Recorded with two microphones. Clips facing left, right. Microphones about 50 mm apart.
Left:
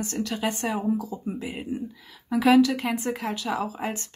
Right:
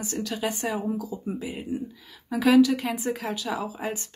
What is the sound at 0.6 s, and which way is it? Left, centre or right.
Speech, centre.